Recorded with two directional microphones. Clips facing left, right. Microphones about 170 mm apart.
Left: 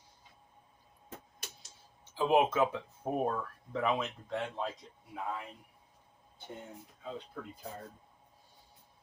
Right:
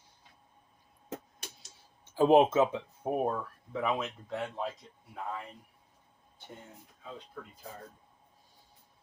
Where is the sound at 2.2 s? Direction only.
40° right (ahead or behind).